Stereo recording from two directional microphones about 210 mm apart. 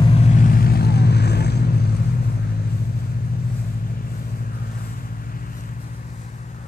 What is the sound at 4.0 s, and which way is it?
Vehicle, 40° left (ahead or behind).